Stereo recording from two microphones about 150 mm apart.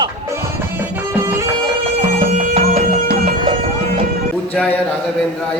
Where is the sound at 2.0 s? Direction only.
45° right (ahead or behind).